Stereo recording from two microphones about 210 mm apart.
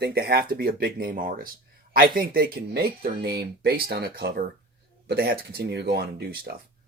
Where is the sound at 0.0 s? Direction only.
50° right (ahead or behind).